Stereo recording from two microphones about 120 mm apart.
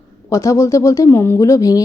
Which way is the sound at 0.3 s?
25° left (ahead or behind).